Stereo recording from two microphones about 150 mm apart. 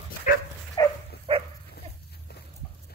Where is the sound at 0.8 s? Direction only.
30° left (ahead or behind).